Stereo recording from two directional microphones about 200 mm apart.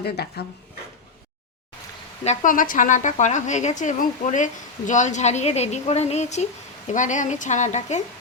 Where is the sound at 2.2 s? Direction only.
40° left (ahead or behind).